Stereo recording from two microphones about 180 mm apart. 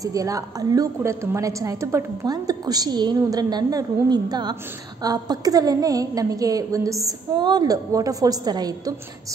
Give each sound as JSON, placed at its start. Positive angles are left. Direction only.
{"t": 0.0, "sound": "a woman's voice", "side_deg": -20}